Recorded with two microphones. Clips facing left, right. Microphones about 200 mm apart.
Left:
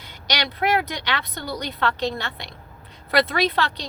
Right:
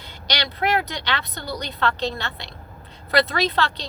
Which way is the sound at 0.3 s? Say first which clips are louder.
Left 1 dB; 20° left (ahead or behind).